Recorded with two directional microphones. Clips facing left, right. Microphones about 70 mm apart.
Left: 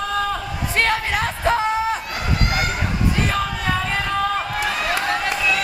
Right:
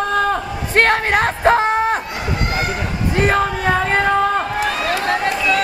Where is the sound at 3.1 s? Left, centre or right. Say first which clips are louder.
Right 6 dB; right.